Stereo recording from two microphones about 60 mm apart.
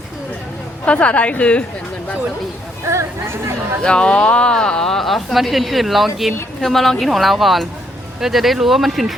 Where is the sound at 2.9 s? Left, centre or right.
Right.